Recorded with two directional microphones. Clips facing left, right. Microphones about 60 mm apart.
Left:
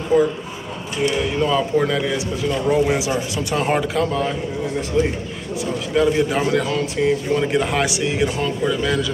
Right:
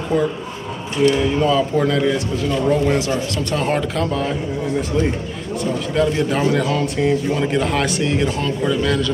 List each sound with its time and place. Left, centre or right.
0.1 s speech: centre
3.1 s a man's voice: centre
3.5 s a man's voice: centre
5.9 s a man's voice: centre